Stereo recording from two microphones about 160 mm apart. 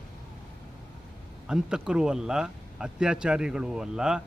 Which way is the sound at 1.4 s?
5° right (ahead or behind).